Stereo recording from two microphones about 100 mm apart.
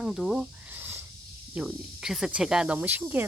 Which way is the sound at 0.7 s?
20° right (ahead or behind).